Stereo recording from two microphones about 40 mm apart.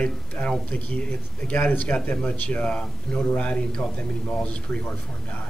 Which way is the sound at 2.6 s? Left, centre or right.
Left.